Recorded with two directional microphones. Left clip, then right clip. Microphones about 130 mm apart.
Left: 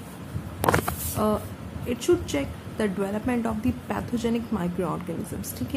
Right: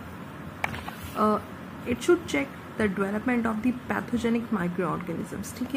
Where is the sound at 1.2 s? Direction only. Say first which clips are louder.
Right 2 dB; 30° right (ahead or behind).